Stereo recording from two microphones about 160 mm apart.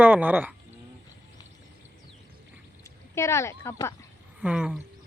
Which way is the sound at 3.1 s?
15° left (ahead or behind).